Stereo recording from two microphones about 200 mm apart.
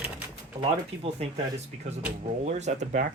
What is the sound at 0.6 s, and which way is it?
Speech, 30° right (ahead or behind).